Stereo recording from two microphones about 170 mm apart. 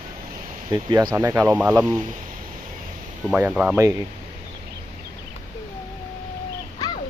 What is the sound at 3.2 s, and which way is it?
Speech, 10° right (ahead or behind).